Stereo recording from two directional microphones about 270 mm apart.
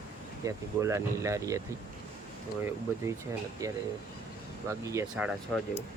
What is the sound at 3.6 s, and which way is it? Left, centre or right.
Speech, centre.